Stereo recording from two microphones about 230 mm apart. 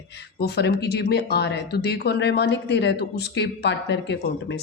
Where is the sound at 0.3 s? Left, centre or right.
Left.